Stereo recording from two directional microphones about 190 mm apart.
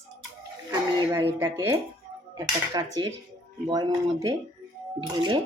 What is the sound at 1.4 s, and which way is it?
A woman's voice, 15° right (ahead or behind).